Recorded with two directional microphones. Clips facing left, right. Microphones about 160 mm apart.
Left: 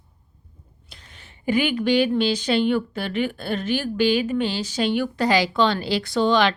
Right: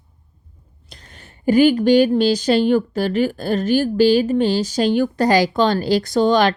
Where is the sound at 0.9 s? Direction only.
45° right (ahead or behind).